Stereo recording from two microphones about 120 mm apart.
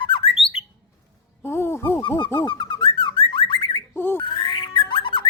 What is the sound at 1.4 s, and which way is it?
Music, 20° left (ahead or behind).